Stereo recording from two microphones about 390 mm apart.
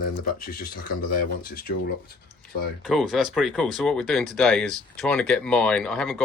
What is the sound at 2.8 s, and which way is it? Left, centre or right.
Speech, centre.